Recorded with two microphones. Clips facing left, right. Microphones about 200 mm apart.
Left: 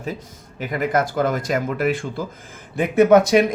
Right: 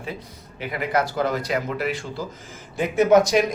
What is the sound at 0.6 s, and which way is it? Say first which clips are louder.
A man's voice: left 3 dB; 45° left (ahead or behind).